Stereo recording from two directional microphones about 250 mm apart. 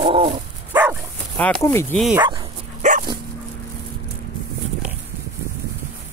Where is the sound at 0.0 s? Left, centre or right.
Right.